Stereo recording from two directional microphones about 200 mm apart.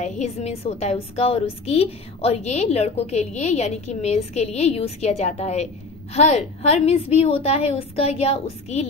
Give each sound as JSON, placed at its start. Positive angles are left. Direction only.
{"t": 0.0, "sound": "a woman's voice", "side_deg": 35}